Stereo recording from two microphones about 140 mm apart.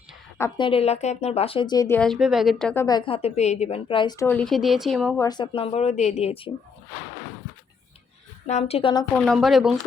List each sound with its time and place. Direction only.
0.5 s a woman's voice: 40° left (ahead or behind)
2.0 s speech: centre (ahead or behind)
2.7 s a woman's voice: 25° left (ahead or behind)
4.3 s speech: 5° left (ahead or behind)
5.3 s a woman's voice: 35° left (ahead or behind)
5.7 s a woman's voice: 50° left (ahead or behind)
8.4 s a woman's voice: 50° left (ahead or behind)
9.2 s speech: centre (ahead or behind)